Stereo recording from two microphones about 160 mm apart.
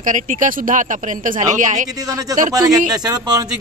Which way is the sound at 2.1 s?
25° right (ahead or behind).